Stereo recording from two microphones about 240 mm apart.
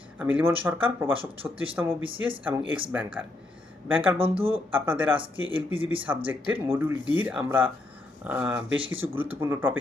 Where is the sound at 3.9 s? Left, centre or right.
Centre.